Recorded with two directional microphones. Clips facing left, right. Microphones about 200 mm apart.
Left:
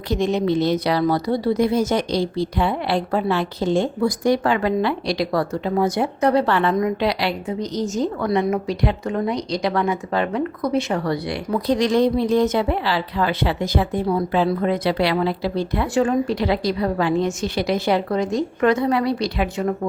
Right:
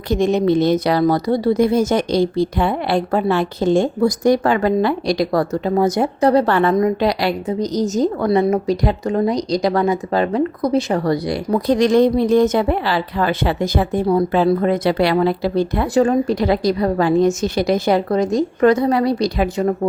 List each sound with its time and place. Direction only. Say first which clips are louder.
0.1 s speech: right 4 dB; 50° right (ahead or behind)